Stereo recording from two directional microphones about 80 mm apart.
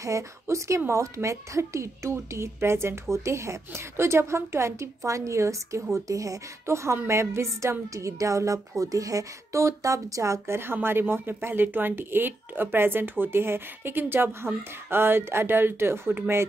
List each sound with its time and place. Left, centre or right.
0.0 s a woman's voice: right